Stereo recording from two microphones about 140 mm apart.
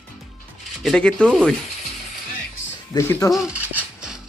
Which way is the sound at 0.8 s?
5° left (ahead or behind).